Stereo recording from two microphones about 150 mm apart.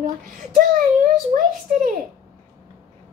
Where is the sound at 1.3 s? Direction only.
60° right (ahead or behind).